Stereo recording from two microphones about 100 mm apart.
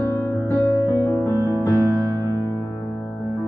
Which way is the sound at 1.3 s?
30° left (ahead or behind).